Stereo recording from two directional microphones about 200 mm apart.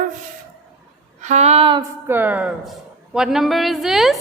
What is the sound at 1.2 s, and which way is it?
Speech, 35° right (ahead or behind).